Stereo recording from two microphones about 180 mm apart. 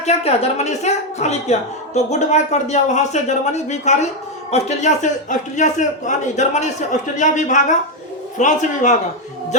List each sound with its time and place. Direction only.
0.0 s a woman's voice: 35° left (ahead or behind)